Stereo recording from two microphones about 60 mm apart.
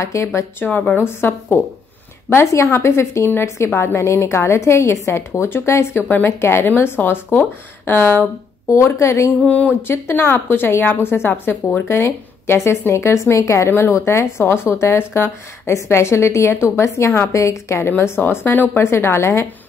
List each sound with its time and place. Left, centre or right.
0.0 s a woman's voice: left
0.7 s a woman's voice: left
1.0 s a woman's voice: left
5.9 s a woman's voice: left
6.4 s a woman's voice: left
8.6 s a woman's voice: left
9.5 s a woman's voice: left
9.8 s a woman's voice: left
13.7 s a woman's voice: left
18.8 s a woman's voice: left